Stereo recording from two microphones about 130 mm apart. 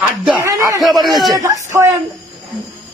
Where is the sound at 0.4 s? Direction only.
25° right (ahead or behind).